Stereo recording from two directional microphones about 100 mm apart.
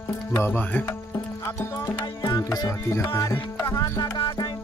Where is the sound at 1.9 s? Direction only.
45° left (ahead or behind).